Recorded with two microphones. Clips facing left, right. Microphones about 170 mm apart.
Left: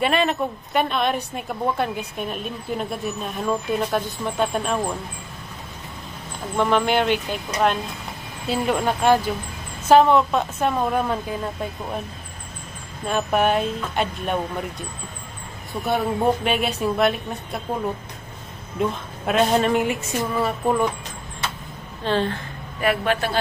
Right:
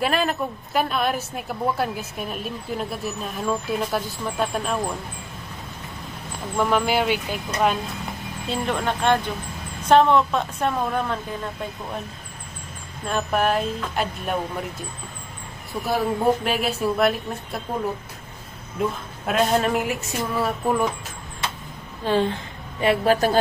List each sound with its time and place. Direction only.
0.0 s a woman's voice: centre (ahead or behind)
6.5 s speech: 5° right (ahead or behind)
8.5 s a woman's voice: 5° left (ahead or behind)
13.0 s a woman's voice: centre (ahead or behind)
15.7 s a woman's voice: centre (ahead or behind)
18.8 s a woman's voice: centre (ahead or behind)
22.0 s speech: 15° right (ahead or behind)
22.8 s a woman's voice: 35° right (ahead or behind)